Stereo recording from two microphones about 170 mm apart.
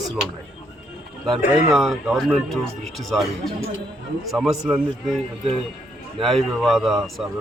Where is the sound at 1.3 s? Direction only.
45° left (ahead or behind).